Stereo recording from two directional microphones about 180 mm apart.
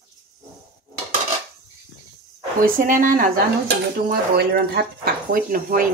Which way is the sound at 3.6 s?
60° right (ahead or behind).